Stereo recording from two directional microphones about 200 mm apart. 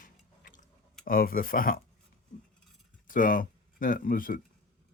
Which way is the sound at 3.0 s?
45° left (ahead or behind).